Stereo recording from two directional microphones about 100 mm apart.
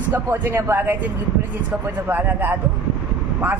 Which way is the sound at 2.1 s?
20° right (ahead or behind).